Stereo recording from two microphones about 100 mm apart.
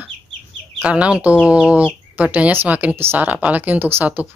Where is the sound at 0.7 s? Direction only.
10° right (ahead or behind).